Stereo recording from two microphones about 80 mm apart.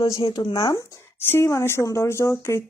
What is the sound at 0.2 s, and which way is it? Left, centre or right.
Speech, left.